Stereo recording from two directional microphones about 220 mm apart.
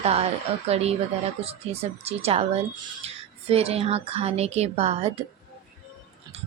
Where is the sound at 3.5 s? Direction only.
25° right (ahead or behind).